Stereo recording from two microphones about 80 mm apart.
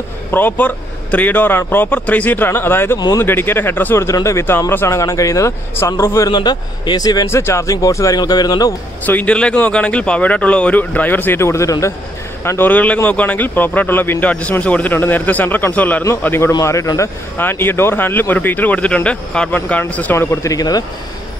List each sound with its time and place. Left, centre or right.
0.3 s a man's voice: left
4.0 s speech: left
6.3 s speech: left
7.2 s speech: left
8.2 s speech: left
9.0 s speech: centre; by 11.9 s left
12.4 s speech: left
16.6 s speech: left
17.4 s speech: left
20.2 s speech: left
20.5 s speech: left